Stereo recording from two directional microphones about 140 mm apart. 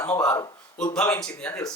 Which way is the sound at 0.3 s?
25° left (ahead or behind).